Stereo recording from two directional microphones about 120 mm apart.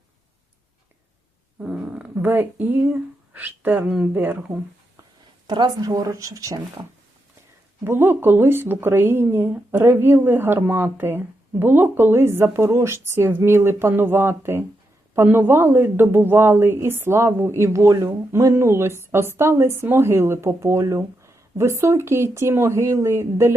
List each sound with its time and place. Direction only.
1.5 s speech: 10° right (ahead or behind)
5.5 s speech: 35° right (ahead or behind)
7.9 s speech: 20° right (ahead or behind)